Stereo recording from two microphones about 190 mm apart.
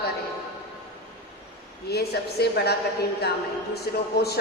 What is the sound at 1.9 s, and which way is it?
Speech, 60° left (ahead or behind).